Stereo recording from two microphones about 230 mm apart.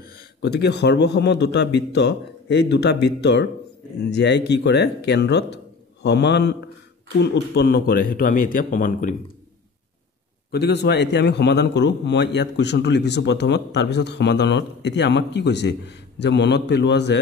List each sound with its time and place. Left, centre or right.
0.0 s a man's voice: left
10.5 s a man's voice: left